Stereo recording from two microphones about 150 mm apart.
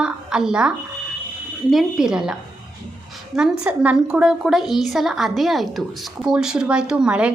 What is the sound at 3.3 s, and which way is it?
A woman's voice, 5° right (ahead or behind).